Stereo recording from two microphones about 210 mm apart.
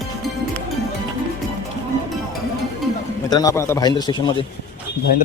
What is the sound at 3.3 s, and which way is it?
A man's voice, 15° left (ahead or behind).